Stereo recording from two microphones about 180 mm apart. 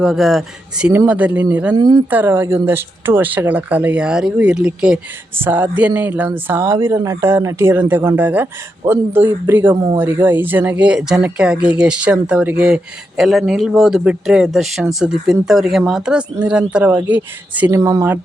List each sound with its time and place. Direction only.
0.0 s speech: centre (ahead or behind)
1.7 s speech: 25° right (ahead or behind)
2.0 s speech: 10° right (ahead or behind)